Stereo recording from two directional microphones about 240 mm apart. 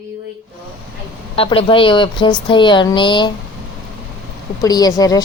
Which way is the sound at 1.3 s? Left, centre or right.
Left.